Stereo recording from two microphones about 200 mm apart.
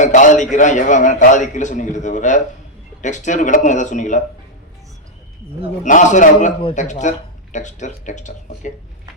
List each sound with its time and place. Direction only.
0.0 s a man's voice: 40° left (ahead or behind)
5.8 s a man's voice: 40° left (ahead or behind)